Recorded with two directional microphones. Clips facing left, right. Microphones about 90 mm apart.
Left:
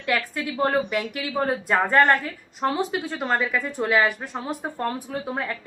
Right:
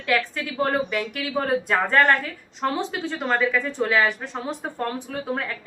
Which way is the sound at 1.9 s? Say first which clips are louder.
Even; 15° left (ahead or behind).